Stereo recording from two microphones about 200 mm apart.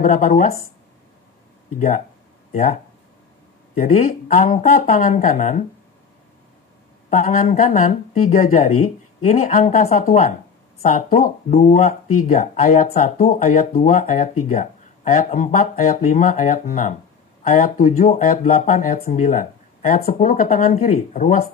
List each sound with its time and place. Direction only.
0.0 s speech: 40° left (ahead or behind)
1.8 s speech: 45° left (ahead or behind)
3.8 s speech: 40° left (ahead or behind)
7.1 s speech: 40° left (ahead or behind)